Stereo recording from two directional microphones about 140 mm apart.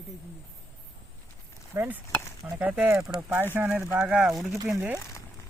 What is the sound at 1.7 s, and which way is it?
Speech, 20° right (ahead or behind).